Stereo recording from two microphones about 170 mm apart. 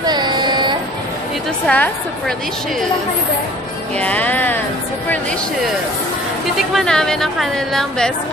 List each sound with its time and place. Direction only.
0.0 s a sound: 25° right (ahead or behind)
1.7 s a woman's voice: 10° left (ahead or behind)
4.0 s a woman's voice: 10° left (ahead or behind)
6.7 s a woman's voice: 5° left (ahead or behind)